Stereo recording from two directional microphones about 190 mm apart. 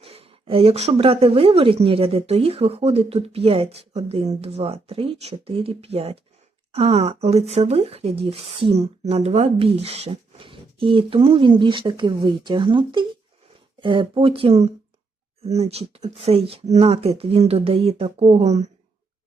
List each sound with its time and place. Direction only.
0.0 s speech: 30° right (ahead or behind)